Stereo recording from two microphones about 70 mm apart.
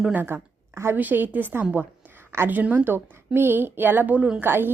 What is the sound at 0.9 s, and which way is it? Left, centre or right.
A woman's voice, right.